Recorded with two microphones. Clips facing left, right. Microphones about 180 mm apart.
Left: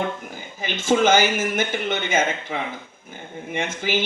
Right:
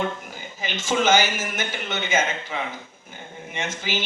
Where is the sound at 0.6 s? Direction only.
55° left (ahead or behind).